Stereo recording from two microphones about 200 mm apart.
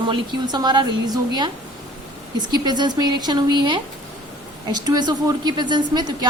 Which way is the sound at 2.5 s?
20° right (ahead or behind).